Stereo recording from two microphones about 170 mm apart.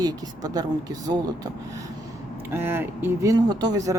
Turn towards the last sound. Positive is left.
turn(degrees=-20)  # may be behind; listen again after turning